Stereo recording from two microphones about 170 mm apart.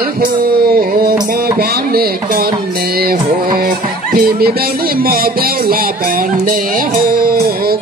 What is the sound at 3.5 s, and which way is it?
Speech, 60° right (ahead or behind).